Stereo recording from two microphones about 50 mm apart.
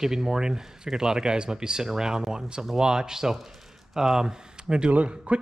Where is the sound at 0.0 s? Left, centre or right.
Centre.